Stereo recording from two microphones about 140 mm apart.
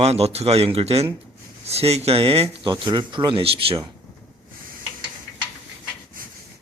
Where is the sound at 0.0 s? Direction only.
45° right (ahead or behind).